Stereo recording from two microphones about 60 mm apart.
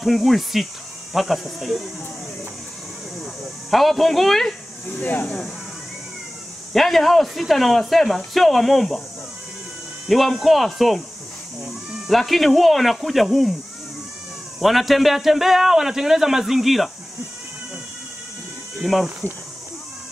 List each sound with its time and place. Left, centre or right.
0.0 s a man's voice: centre
3.7 s a man's voice: centre
4.8 s speech: left
6.7 s a man's voice: centre
10.0 s a man's voice: centre
12.1 s a man's voice: centre
14.6 s a man's voice: centre
18.8 s speech: centre